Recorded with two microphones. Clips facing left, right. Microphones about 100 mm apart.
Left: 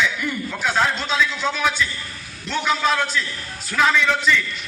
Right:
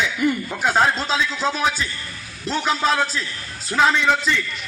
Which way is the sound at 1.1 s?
35° right (ahead or behind).